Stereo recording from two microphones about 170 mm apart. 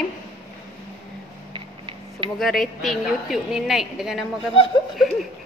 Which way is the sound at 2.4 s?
Centre (ahead or behind).